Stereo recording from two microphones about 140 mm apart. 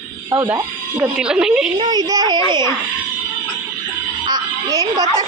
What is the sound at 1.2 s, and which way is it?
Speech, 5° right (ahead or behind).